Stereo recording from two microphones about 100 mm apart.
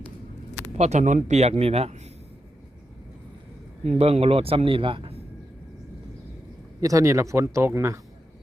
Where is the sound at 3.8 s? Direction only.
90° right; by 5.2 s 65° right (ahead or behind).